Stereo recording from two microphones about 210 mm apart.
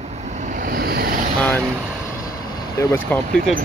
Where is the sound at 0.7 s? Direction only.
45° right (ahead or behind).